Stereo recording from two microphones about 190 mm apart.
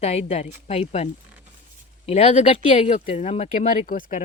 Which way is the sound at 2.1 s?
35° left (ahead or behind).